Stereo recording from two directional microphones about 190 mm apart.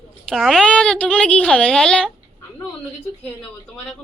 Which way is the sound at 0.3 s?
Centre (ahead or behind).